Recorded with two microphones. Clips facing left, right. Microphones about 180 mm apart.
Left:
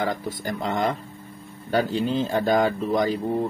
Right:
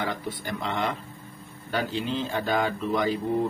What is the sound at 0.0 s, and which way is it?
Speech, 40° left (ahead or behind).